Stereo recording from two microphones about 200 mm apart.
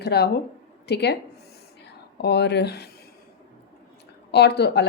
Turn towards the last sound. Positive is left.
turn(degrees=55)  # may be behind; listen again after turning